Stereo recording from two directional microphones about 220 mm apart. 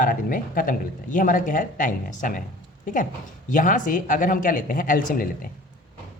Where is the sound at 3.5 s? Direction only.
35° left (ahead or behind).